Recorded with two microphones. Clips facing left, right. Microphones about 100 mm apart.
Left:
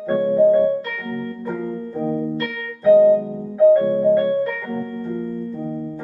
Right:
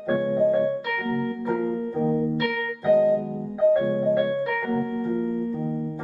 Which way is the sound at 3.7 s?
10° right (ahead or behind).